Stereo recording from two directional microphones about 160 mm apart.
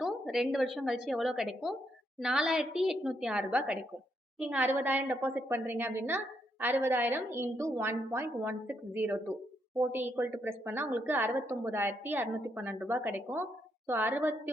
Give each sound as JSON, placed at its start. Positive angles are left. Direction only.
{"t": 0.0, "sound": "a woman's voice", "side_deg": 0}